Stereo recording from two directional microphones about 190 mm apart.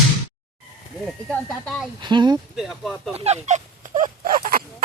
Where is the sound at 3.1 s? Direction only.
35° right (ahead or behind).